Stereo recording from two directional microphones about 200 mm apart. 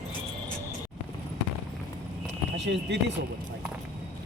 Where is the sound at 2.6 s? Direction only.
60° right (ahead or behind).